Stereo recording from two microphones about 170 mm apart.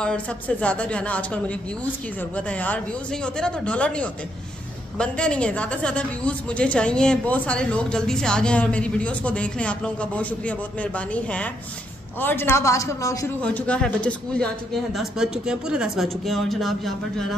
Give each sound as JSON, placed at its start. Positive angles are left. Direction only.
{"t": 0.0, "sound": "a woman's voice", "side_deg": 5}
{"t": 13.4, "sound": "speech", "side_deg": 10}